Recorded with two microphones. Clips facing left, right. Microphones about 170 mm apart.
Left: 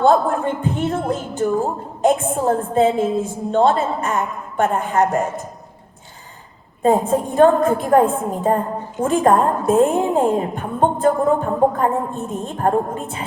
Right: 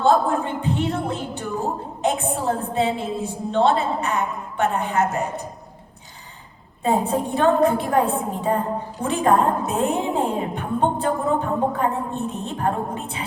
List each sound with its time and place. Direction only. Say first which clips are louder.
0.0 s a woman's voice: left 3 dB; 50° left (ahead or behind)
6.8 s a woman's voice: left 5 dB; 45° left (ahead or behind)